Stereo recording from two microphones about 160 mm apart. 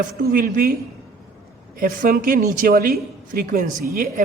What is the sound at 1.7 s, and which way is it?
A man's voice, 65° right (ahead or behind).